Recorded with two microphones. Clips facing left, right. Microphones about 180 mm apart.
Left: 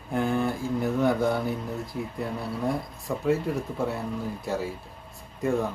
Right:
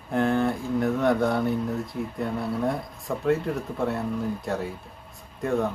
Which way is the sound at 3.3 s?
Centre (ahead or behind).